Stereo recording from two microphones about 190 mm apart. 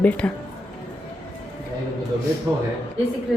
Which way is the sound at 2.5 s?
20° right (ahead or behind).